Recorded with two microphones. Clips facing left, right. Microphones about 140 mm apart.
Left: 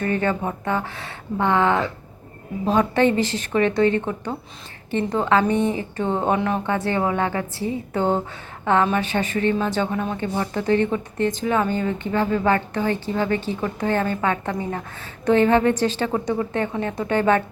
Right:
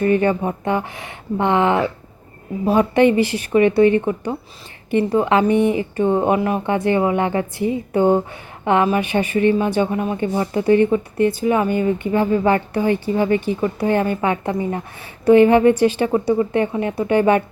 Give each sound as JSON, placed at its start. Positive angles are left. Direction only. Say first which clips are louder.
{"t": 0.0, "sound": "a woman's voice", "louder": "right 6 dB", "side_deg": -15}